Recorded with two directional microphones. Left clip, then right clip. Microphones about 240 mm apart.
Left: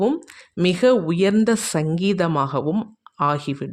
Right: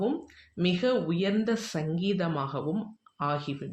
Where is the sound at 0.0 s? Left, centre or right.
Left.